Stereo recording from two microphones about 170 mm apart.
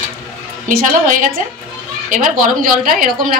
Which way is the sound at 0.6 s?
50° right (ahead or behind).